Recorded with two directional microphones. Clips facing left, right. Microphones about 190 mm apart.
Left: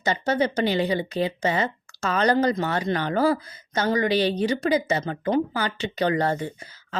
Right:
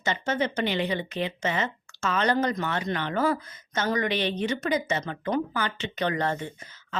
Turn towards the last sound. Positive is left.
turn(degrees=35)  # may be behind; listen again after turning